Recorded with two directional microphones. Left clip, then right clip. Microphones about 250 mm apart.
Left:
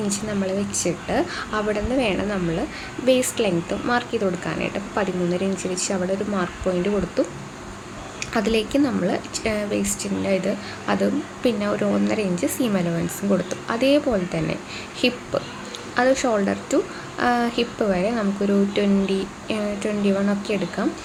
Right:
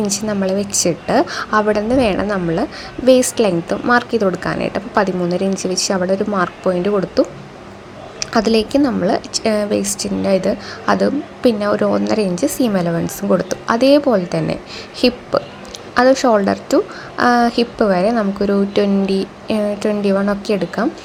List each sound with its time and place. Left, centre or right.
0.1 s a woman's voice: right